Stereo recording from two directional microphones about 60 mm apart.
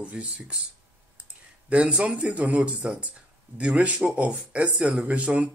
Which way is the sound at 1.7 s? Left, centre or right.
Centre.